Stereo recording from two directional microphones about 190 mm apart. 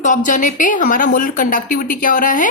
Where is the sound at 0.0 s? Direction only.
40° left (ahead or behind).